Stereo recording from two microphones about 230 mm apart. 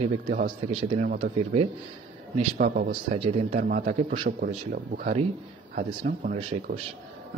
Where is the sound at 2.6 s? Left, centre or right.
Right.